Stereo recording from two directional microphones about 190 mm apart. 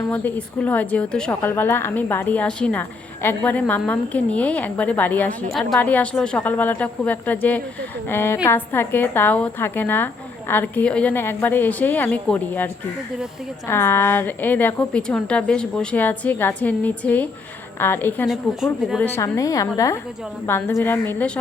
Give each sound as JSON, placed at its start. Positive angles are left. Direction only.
{"t": 0.1, "sound": "a woman's voice", "side_deg": 5}
{"t": 18.3, "sound": "speech", "side_deg": 0}
{"t": 19.0, "sound": "a woman's voice", "side_deg": 15}